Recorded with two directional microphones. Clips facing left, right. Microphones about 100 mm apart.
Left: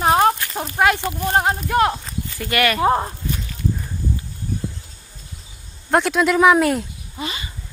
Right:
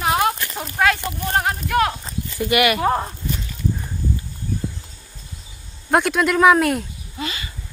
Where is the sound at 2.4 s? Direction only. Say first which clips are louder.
Right 2 dB; 15° right (ahead or behind).